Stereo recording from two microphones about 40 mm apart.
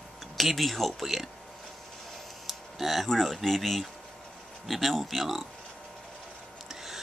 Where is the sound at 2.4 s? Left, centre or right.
Centre.